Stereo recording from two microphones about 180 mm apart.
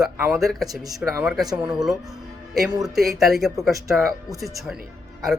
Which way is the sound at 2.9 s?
Centre (ahead or behind).